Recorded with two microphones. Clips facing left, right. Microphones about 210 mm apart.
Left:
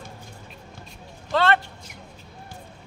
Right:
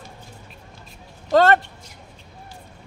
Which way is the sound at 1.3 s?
45° right (ahead or behind).